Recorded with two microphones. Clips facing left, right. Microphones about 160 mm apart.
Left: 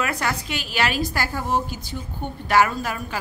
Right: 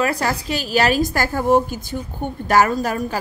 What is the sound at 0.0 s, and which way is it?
A woman's voice, 35° right (ahead or behind).